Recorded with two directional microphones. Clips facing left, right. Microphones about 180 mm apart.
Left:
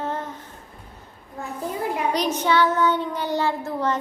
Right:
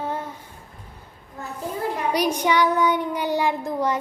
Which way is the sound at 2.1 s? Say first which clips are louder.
Right 1 dB; 10° right (ahead or behind).